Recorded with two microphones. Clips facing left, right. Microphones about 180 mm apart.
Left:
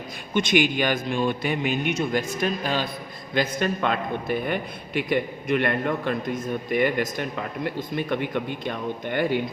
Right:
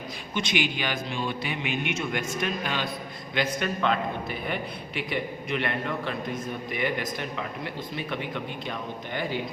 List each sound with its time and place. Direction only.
0.3 s a man's voice: 50° left (ahead or behind)